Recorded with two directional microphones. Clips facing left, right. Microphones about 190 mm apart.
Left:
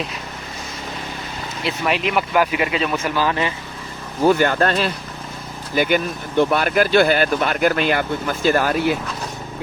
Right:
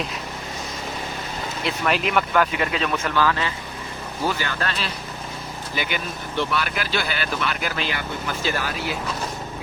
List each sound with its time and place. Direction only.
1.6 s speech: centre (ahead or behind)
2.9 s speech: 15° left (ahead or behind)
4.3 s speech: 50° left (ahead or behind)